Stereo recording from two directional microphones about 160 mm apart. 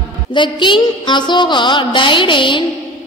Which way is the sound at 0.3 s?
30° left (ahead or behind).